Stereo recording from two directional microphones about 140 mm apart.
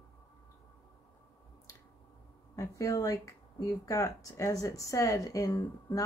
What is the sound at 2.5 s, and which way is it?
Speech, 25° left (ahead or behind).